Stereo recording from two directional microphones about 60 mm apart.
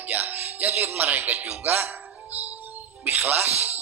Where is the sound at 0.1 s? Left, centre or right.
Right.